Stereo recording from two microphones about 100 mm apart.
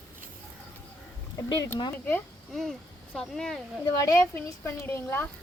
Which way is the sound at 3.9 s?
40° left (ahead or behind).